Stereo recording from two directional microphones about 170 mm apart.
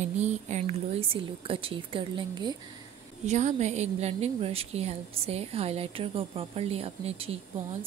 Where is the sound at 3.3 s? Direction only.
45° right (ahead or behind).